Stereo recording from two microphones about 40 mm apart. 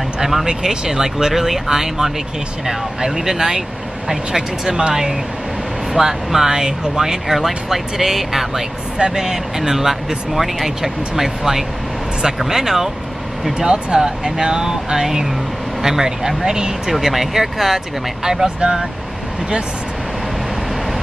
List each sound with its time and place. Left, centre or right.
0.2 s speech: centre
8.9 s speech: centre
13.6 s speech: right
16.9 s speech: centre